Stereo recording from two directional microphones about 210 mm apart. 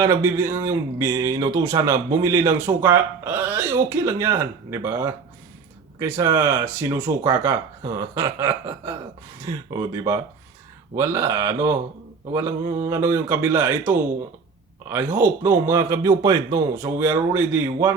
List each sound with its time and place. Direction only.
0.0 s speech: 15° right (ahead or behind)